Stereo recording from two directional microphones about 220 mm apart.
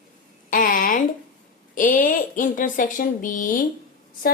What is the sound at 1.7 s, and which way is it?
A woman's voice, 35° left (ahead or behind).